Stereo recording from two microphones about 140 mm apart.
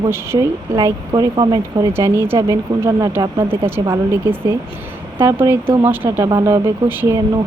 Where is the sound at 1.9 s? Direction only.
15° right (ahead or behind).